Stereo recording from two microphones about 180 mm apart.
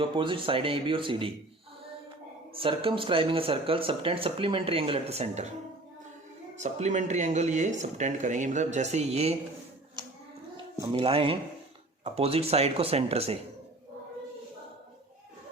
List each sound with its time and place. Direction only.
0.0 s speech: 30° right (ahead or behind)
2.6 s speech: 30° right (ahead or behind)
6.6 s speech: 40° right (ahead or behind)
10.0 s hands: 25° right (ahead or behind)
10.9 s speech: 30° right (ahead or behind)